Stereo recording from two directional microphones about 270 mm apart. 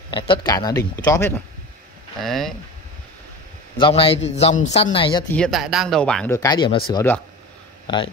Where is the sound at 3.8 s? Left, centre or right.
Centre.